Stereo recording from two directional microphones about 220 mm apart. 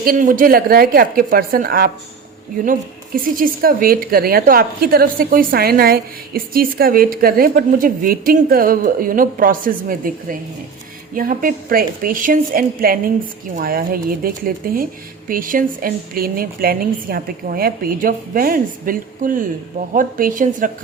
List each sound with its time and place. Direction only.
0.0 s a woman's voice: 40° right (ahead or behind)
3.3 s a woman's voice: 40° right (ahead or behind)